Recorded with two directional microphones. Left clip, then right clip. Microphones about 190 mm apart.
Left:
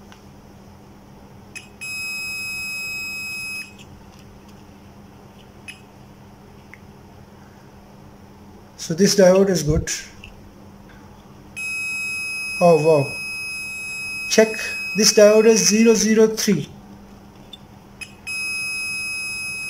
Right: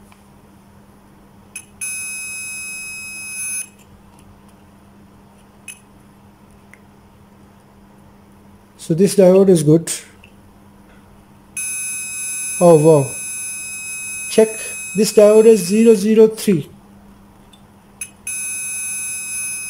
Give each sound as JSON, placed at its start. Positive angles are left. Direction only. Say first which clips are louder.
{"t": 8.7, "sound": "speech", "louder": "right 3 dB", "side_deg": -15}
{"t": 9.4, "sound": "speech", "louder": "right 7 dB", "side_deg": -25}
{"t": 12.5, "sound": "speech", "louder": "right 5 dB", "side_deg": -25}
{"t": 14.3, "sound": "speech", "louder": "right 2 dB", "side_deg": -15}